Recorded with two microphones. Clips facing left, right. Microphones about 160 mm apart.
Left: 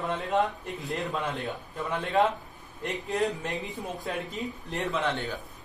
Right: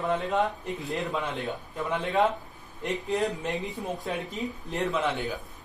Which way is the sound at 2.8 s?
Centre (ahead or behind).